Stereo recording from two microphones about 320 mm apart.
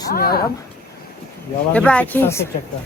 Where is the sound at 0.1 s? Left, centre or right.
Left.